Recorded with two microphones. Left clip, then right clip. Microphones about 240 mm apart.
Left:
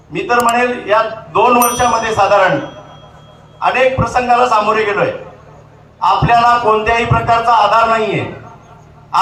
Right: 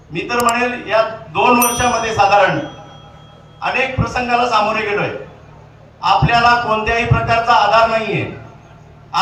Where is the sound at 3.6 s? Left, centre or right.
Left.